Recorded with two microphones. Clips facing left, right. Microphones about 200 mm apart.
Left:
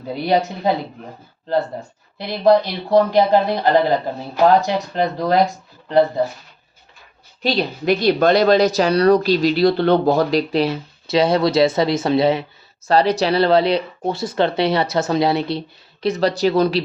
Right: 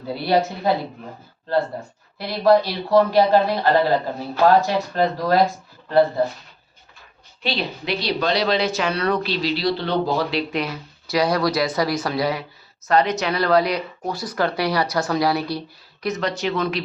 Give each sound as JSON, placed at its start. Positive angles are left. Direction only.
{"t": 0.1, "sound": "speech", "side_deg": 20}
{"t": 2.1, "sound": "speech", "side_deg": 20}
{"t": 7.4, "sound": "speech", "side_deg": 45}
{"t": 10.5, "sound": "speech", "side_deg": 30}